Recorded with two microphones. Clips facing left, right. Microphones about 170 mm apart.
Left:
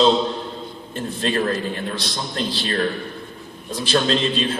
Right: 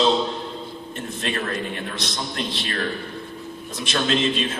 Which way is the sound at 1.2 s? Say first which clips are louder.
Left 6 dB; 35° left (ahead or behind).